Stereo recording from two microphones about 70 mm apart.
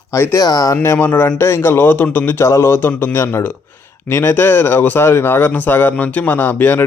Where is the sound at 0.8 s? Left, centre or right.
Left.